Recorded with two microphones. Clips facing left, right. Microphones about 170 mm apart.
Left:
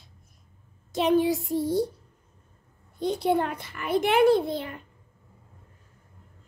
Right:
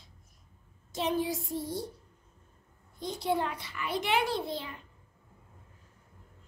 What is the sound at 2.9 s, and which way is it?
A child's voice, 60° left (ahead or behind).